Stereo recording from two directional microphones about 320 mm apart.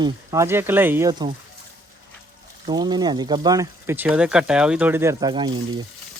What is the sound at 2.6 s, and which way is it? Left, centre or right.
Speech, centre.